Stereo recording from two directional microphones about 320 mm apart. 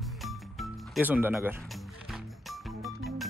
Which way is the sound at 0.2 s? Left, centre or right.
Centre.